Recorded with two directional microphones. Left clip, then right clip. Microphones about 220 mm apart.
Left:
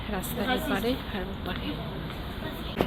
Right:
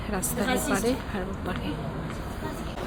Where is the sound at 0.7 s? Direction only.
Centre (ahead or behind).